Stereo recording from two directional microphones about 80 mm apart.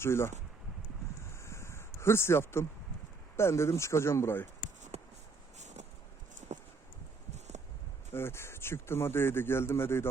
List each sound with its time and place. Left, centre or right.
0.0 s speech: left
1.2 s a sound: left
3.3 s speech: left
8.1 s speech: left